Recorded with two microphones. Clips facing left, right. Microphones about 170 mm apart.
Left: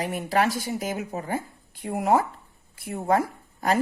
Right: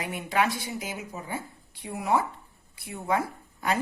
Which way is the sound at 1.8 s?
50° left (ahead or behind).